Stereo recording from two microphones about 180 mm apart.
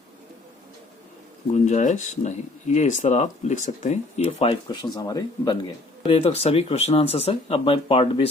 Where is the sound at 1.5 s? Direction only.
40° left (ahead or behind); by 5.6 s 20° left (ahead or behind).